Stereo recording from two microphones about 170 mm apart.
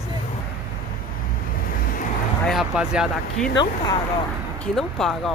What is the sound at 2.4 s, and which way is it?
Speech, centre (ahead or behind).